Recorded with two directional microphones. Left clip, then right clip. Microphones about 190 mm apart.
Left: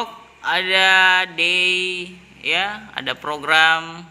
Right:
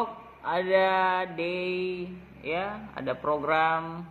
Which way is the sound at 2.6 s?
20° left (ahead or behind).